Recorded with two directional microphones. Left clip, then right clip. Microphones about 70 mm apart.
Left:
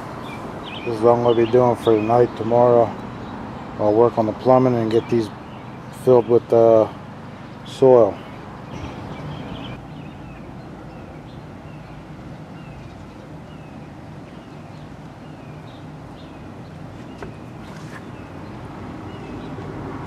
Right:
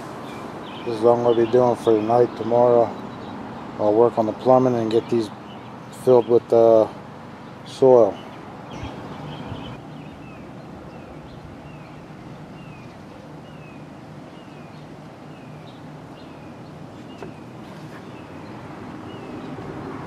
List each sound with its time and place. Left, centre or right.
0.3 s a sound: centre
1.5 s speech: centre
2.6 s speech: centre
4.1 s speech: centre